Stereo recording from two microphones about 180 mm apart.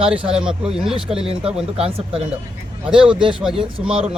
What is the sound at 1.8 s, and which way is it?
Speech, 30° right (ahead or behind).